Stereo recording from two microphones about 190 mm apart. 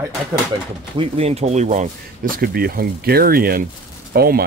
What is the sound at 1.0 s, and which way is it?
Speech, 30° right (ahead or behind).